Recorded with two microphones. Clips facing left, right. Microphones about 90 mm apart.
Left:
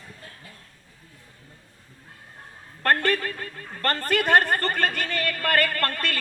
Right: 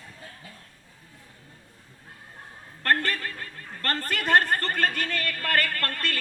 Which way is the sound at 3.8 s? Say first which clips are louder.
Left 5 dB; 50° left (ahead or behind).